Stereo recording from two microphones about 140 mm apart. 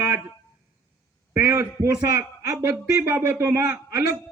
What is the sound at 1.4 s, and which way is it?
A man's voice, 20° right (ahead or behind).